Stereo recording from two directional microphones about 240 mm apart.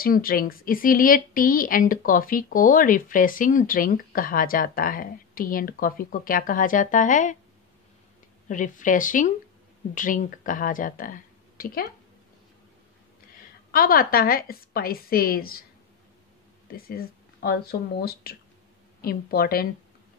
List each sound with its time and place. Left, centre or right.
0.0 s speech: left
8.5 s speech: left
13.7 s speech: left
16.6 s speech: left